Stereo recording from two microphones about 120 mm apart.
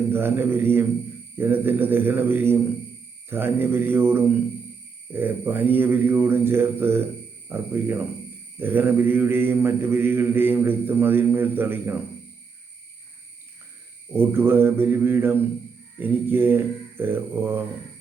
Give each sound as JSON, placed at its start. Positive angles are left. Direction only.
{"t": 0.1, "sound": "mantra", "side_deg": -20}
{"t": 14.1, "sound": "mantra", "side_deg": -20}